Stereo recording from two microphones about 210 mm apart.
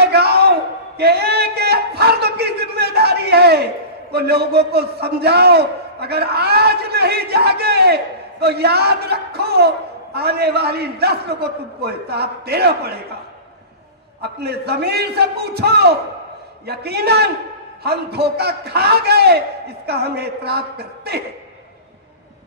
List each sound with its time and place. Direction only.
0.0 s a sound: 50° right (ahead or behind)
0.9 s a man's voice: 50° right (ahead or behind)
14.2 s a man's voice: 50° right (ahead or behind)